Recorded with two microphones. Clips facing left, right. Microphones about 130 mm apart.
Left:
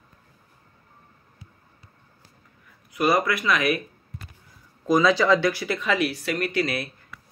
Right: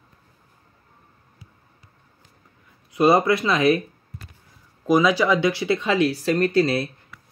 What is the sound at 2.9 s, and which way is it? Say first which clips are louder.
Speech: right 5 dB; 25° right (ahead or behind).